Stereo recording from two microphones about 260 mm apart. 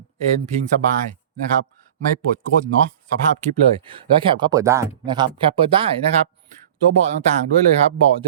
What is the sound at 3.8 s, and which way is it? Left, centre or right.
Speech, centre.